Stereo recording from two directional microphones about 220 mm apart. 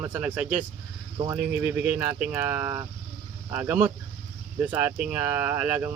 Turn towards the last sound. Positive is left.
turn(degrees=-10)  # may be behind; listen again after turning